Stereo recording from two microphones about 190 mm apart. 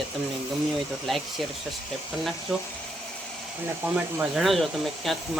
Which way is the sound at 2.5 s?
Centre (ahead or behind).